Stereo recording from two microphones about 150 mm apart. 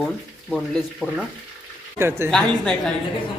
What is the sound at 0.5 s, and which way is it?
Speech, 5° left (ahead or behind).